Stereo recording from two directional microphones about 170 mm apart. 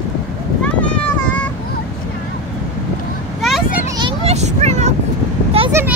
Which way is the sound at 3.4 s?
Centre (ahead or behind).